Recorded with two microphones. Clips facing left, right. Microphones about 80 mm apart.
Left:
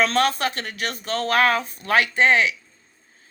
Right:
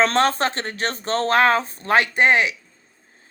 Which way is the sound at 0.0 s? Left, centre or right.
Right.